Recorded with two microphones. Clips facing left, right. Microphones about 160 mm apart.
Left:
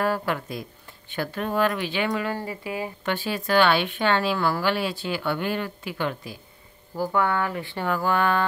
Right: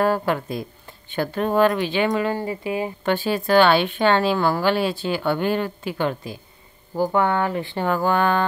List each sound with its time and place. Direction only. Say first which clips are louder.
0.0 s speech: right 5 dB; 30° right (ahead or behind)
3.1 s a woman's voice: right 5 dB; 35° right (ahead or behind)